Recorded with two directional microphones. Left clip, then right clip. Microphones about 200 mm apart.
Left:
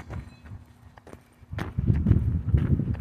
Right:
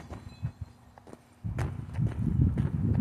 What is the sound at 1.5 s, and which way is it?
Clip-clop, 60° left (ahead or behind).